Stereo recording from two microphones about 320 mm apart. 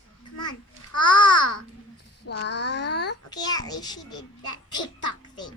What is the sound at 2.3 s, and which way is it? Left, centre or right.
Child singing, left.